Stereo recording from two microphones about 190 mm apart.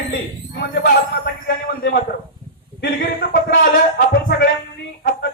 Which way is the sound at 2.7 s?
55° left (ahead or behind).